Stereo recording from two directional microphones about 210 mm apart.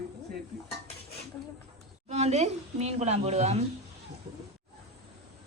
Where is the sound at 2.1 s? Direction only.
30° right (ahead or behind).